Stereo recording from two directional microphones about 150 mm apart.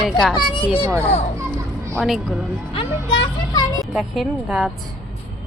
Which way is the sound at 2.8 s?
35° left (ahead or behind).